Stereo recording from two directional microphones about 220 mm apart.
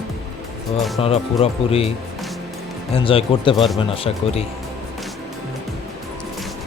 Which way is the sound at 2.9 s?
25° left (ahead or behind).